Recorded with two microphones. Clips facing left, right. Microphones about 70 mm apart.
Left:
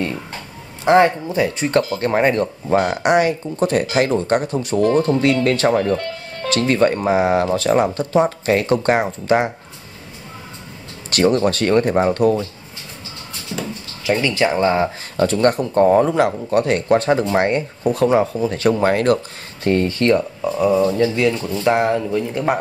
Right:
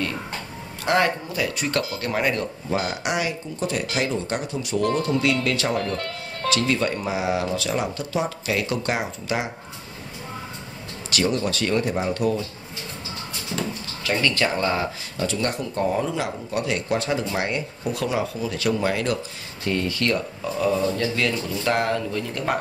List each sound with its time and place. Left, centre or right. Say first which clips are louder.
0.8 s speech: left 8 dB; left
2.7 s speech: left 8 dB; left
3.0 s speech: left 10 dB; left
5.8 s music: left 7 dB; centre
6.5 s speech: left 7 dB; left
11.1 s speech: left 8 dB; left
13.5 s a sound: left 2 dB; centre
14.0 s speech: left 5 dB; centre
15.1 s speech: left 10 dB; left
21.1 s speech: left 6 dB; centre